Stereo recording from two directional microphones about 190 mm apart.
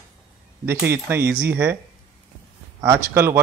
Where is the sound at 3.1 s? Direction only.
15° right (ahead or behind).